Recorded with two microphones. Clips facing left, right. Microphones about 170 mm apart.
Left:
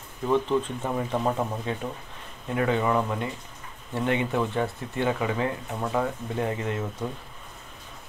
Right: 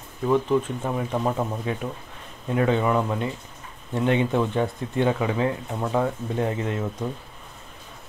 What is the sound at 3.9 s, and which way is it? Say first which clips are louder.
Speech: right 4 dB; 20° right (ahead or behind).